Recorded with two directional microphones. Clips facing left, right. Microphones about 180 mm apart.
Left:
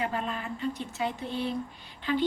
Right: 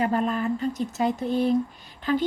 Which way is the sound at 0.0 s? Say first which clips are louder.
Right 8 dB; 45° right (ahead or behind).